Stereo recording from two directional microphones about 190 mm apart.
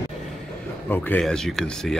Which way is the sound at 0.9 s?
5° left (ahead or behind).